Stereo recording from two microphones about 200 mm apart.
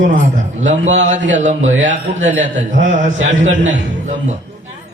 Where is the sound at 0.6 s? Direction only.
35° right (ahead or behind).